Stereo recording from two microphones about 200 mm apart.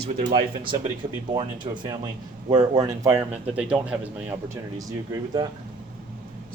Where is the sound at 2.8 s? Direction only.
15° right (ahead or behind).